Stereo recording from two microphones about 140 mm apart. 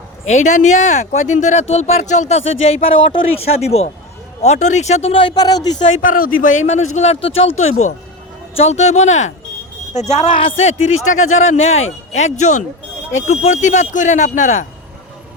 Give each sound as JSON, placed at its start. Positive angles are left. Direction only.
{"t": 0.3, "sound": "a man's voice", "side_deg": 60}
{"t": 5.9, "sound": "a man's voice", "side_deg": 75}